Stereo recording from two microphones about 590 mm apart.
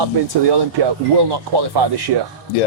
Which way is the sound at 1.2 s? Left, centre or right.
Right.